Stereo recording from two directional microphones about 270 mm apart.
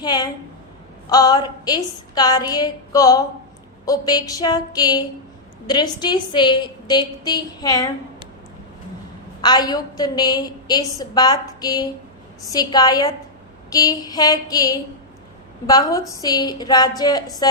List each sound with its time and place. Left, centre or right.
0.0 s a woman's voice: centre
9.4 s a woman's voice: centre